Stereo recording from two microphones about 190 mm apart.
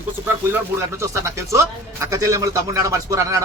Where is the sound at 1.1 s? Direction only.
15° right (ahead or behind).